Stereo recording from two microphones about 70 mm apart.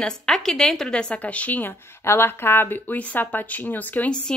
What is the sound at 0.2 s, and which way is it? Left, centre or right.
A woman's voice, centre.